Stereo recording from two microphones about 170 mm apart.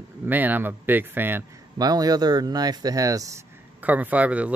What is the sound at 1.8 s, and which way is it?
Speech, 20° right (ahead or behind).